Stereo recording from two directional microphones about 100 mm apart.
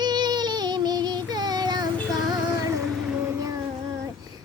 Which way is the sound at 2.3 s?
35° right (ahead or behind).